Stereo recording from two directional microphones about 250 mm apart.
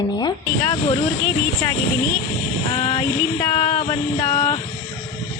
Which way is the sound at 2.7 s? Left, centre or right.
Centre.